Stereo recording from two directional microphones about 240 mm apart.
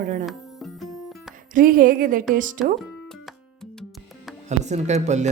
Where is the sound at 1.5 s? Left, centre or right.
Right.